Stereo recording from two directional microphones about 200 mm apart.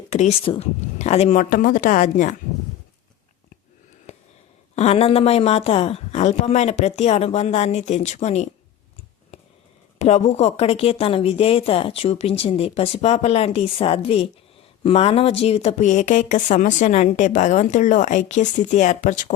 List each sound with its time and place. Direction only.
0.1 s speech: 35° left (ahead or behind)
4.1 s a sound: 35° left (ahead or behind)
4.7 s speech: 30° left (ahead or behind)
10.0 s a woman's voice: 35° left (ahead or behind)